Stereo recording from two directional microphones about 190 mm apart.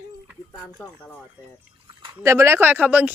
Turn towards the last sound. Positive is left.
turn(degrees=-10)  # may be behind; listen again after turning